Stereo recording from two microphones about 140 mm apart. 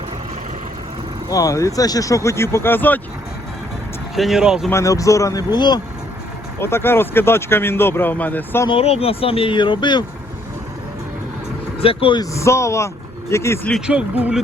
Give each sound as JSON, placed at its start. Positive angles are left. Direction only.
{"t": 1.3, "sound": "speech", "side_deg": 25}
{"t": 4.1, "sound": "speech", "side_deg": 0}
{"t": 4.7, "sound": "speech", "side_deg": 25}
{"t": 6.6, "sound": "speech", "side_deg": 15}
{"t": 8.6, "sound": "speech", "side_deg": 45}
{"t": 11.8, "sound": "speech", "side_deg": 40}
{"t": 12.2, "sound": "speech", "side_deg": 20}
{"t": 13.8, "sound": "speech", "side_deg": -10}